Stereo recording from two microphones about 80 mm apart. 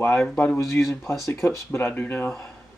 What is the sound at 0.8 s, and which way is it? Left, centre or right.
Speech, left.